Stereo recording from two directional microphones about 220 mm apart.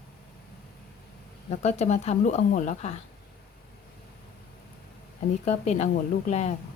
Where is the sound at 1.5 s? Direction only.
30° left (ahead or behind).